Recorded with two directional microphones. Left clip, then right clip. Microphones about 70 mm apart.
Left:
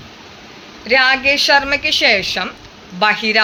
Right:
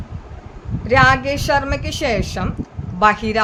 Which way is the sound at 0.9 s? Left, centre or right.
Right.